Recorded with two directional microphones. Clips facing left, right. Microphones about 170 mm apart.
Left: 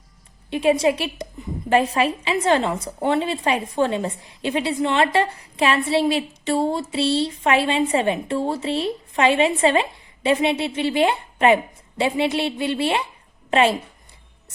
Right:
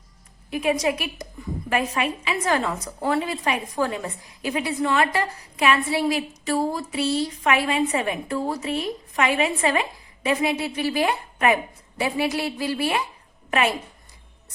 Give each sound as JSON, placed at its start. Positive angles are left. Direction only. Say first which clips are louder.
{"t": 0.5, "sound": "a woman's voice", "louder": "left 4 dB", "side_deg": 30}